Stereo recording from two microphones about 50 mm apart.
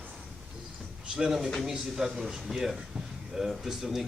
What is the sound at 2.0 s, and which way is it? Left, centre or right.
Speech, centre.